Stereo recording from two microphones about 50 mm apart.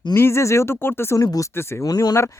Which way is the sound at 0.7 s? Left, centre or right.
Left.